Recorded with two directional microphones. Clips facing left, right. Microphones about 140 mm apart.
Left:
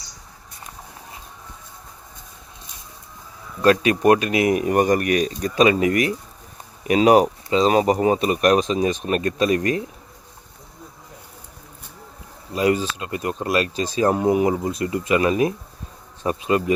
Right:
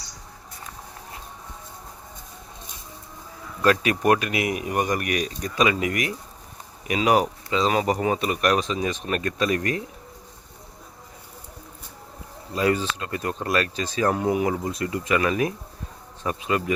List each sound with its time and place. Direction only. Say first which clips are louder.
3.6 s speech: left 4 dB; 25° left (ahead or behind)
9.0 s speech: left 4 dB; 25° left (ahead or behind)
12.5 s speech: left 3 dB; 15° left (ahead or behind)